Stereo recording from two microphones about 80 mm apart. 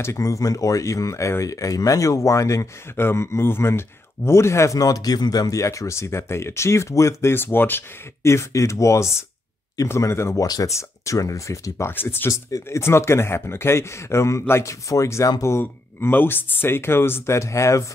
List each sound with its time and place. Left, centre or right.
0.0 s speech: left
10.4 s speech: left
11.9 s speech: left
12.3 s speech: left
12.6 s speech: left